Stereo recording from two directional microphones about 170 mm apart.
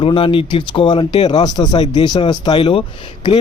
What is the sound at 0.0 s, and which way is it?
Speech, 30° left (ahead or behind).